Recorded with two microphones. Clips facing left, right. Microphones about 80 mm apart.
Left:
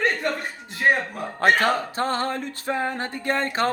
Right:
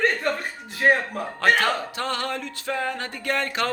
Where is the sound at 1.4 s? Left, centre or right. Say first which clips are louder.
Left 2 dB; left.